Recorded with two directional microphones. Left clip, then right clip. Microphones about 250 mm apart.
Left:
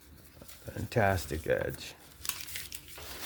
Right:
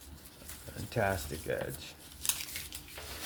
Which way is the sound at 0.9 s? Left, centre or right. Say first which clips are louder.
Left 4 dB; left.